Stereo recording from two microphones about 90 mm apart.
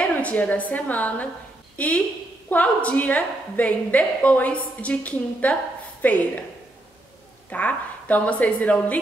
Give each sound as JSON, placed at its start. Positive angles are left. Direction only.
{"t": 0.0, "sound": "a woman's voice", "side_deg": 15}
{"t": 7.4, "sound": "a woman's voice", "side_deg": 15}